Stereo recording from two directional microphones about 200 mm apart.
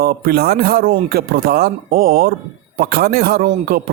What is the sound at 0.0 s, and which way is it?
A man's voice, 50° right (ahead or behind).